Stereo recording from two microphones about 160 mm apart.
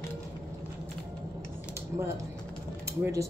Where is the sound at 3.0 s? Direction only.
20° right (ahead or behind).